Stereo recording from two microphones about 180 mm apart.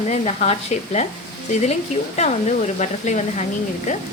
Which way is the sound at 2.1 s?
40° left (ahead or behind).